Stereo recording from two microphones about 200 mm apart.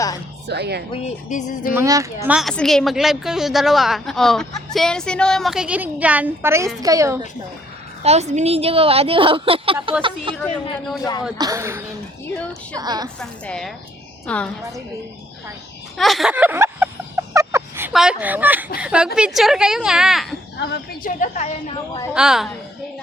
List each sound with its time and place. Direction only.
0.4 s speech: 55° right (ahead or behind)
1.0 s speech: 35° left (ahead or behind)
1.7 s speech: 15° right (ahead or behind)
2.2 s a woman's voice: 5° right (ahead or behind)
8.0 s a woman's voice: 35° right (ahead or behind)
10.3 s a woman's voice: 5° left (ahead or behind)
11.3 s a woman's voice: 15° right (ahead or behind)
13.1 s a woman's voice: 5° left (ahead or behind)
16.0 s speech: centre (ahead or behind)
17.3 s a sound: 10° right (ahead or behind)
18.8 s a woman's voice: 5° right (ahead or behind)
20.6 s a woman's voice: 55° left (ahead or behind); by 21.8 s 35° left (ahead or behind)
22.1 s a woman's voice: 5° right (ahead or behind)